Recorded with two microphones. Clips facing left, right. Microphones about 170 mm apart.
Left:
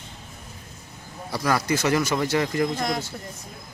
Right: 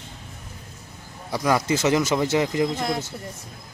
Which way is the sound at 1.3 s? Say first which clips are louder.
Right 2 dB; 15° right (ahead or behind).